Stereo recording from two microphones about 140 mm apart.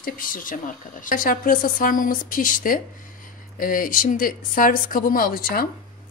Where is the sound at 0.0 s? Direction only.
75° left (ahead or behind).